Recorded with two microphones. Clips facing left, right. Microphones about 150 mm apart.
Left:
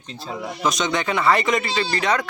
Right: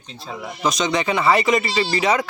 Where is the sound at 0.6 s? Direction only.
Centre (ahead or behind).